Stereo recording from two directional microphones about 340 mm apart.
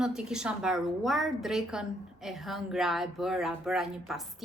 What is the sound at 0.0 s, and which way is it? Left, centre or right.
A woman's voice, centre.